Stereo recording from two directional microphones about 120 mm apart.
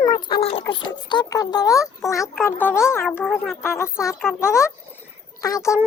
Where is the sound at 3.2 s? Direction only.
Centre (ahead or behind).